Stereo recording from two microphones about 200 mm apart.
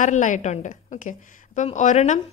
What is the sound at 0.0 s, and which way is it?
Speech, 40° left (ahead or behind).